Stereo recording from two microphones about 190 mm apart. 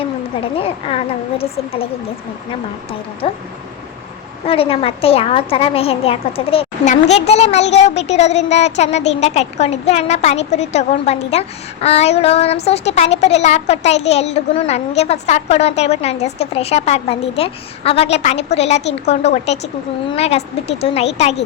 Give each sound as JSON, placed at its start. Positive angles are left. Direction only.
{"t": 0.5, "sound": "a child's voice", "side_deg": 30}
{"t": 3.2, "sound": "speech", "side_deg": 30}
{"t": 4.4, "sound": "a child's voice", "side_deg": 30}